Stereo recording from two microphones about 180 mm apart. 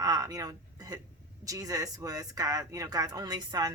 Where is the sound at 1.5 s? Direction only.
20° right (ahead or behind).